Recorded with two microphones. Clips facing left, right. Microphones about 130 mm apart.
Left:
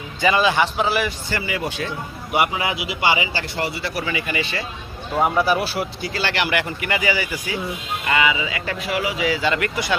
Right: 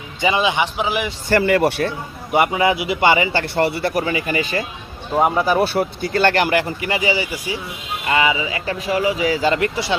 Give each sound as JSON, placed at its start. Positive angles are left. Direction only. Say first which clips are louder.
{"t": 0.2, "sound": "a man's voice", "louder": "even", "side_deg": -20}
{"t": 1.3, "sound": "speech", "louder": "right 10 dB", "side_deg": -60}
{"t": 2.3, "sound": "speech", "louder": "right 4 dB", "side_deg": -40}
{"t": 2.8, "sound": "a man's voice", "louder": "right 5 dB", "side_deg": -50}
{"t": 4.0, "sound": "speech", "louder": "right 4 dB", "side_deg": -40}
{"t": 5.2, "sound": "a man's voice", "louder": "right 2 dB", "side_deg": -15}
{"t": 5.6, "sound": "speech", "louder": "right 5 dB", "side_deg": -55}